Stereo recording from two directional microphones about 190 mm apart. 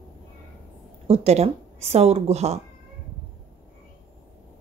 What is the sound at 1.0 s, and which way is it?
A woman's voice, 35° right (ahead or behind).